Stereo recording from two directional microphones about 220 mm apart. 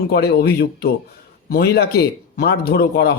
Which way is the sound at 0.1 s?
45° left (ahead or behind).